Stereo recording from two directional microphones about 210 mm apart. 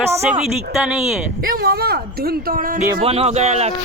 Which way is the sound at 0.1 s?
10° right (ahead or behind).